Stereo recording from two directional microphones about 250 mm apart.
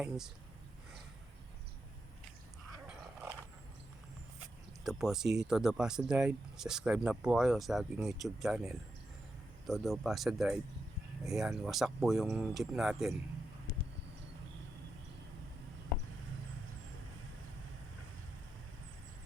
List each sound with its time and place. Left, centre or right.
4.8 s speech: centre